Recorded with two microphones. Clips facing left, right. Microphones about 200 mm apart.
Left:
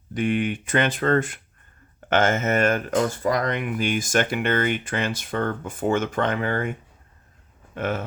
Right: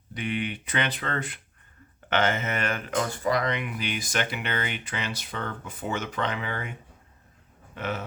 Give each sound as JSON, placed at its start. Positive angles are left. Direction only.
{"t": 0.1, "sound": "speech", "side_deg": 50}
{"t": 7.8, "sound": "speech", "side_deg": 50}